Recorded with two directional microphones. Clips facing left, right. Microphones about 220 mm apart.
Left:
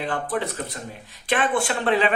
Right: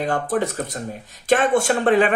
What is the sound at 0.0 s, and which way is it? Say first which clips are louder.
Speech: right 5 dB; 45° right (ahead or behind).